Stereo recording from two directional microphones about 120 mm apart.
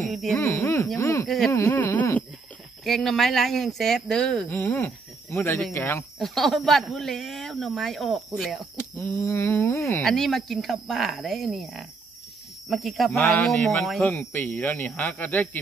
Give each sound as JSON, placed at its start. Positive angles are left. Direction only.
{"t": 0.0, "sound": "speech", "side_deg": 0}
{"t": 0.4, "sound": "speech", "side_deg": 20}
{"t": 1.2, "sound": "speech", "side_deg": 0}
{"t": 1.5, "sound": "speech", "side_deg": 20}
{"t": 2.8, "sound": "speech", "side_deg": 0}
{"t": 4.5, "sound": "speech", "side_deg": 15}
{"t": 6.1, "sound": "speech", "side_deg": 0}
{"t": 8.7, "sound": "speech", "side_deg": 20}
{"t": 10.0, "sound": "speech", "side_deg": 5}